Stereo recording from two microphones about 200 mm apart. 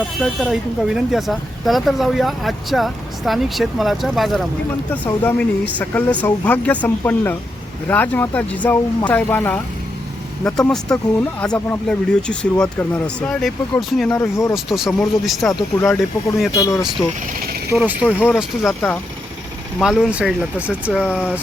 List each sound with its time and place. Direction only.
0.2 s speech: centre (ahead or behind)
10.7 s speech: 5° left (ahead or behind)
14.1 s speech: 15° left (ahead or behind)
14.5 s speech: centre (ahead or behind)
16.6 s speech: 15° left (ahead or behind)
17.7 s speech: 5° right (ahead or behind)
21.0 s speech: 10° left (ahead or behind)